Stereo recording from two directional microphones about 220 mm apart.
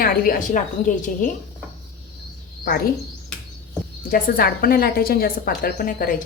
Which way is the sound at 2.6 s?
45° left (ahead or behind).